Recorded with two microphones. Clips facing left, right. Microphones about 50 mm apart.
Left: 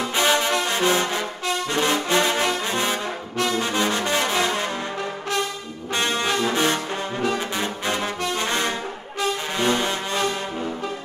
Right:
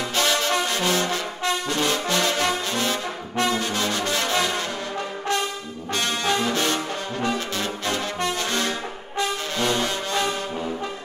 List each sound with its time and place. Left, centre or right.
0.1 s brass instrument: centre
6.4 s brass instrument: left
8.5 s brass instrument: left
9.6 s music: left